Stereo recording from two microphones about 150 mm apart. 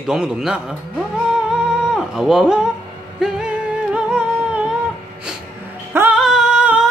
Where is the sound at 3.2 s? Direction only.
5° right (ahead or behind).